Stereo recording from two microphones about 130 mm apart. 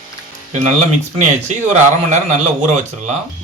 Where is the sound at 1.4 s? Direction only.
60° right (ahead or behind).